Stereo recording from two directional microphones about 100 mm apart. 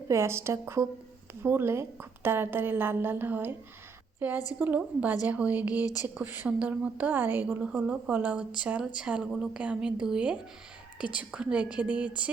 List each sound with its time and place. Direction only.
0.1 s a woman's voice: 25° right (ahead or behind)
5.8 s speech: 40° left (ahead or behind)
6.1 s a woman's voice: 20° right (ahead or behind)